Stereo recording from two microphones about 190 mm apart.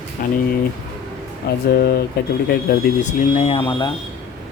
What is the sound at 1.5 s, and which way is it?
Speech, 55° left (ahead or behind).